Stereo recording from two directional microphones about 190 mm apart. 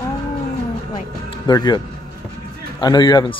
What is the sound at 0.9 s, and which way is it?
Music, 25° left (ahead or behind).